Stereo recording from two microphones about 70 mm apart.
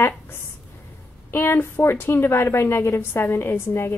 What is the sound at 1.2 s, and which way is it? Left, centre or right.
A woman's voice, left.